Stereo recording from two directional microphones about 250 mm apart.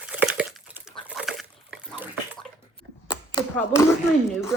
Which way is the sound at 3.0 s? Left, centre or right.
Centre.